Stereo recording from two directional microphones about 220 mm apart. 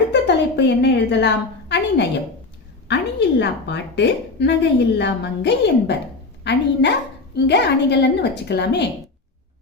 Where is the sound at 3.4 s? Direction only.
50° left (ahead or behind).